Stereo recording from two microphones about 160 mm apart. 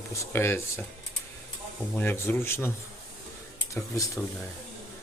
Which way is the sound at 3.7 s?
20° left (ahead or behind).